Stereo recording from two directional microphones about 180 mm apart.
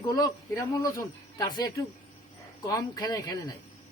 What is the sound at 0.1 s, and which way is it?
A man's voice, 20° left (ahead or behind).